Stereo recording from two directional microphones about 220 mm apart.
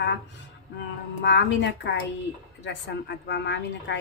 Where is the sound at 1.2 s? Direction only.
55° left (ahead or behind).